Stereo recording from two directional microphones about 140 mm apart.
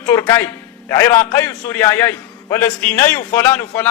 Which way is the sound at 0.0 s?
20° left (ahead or behind).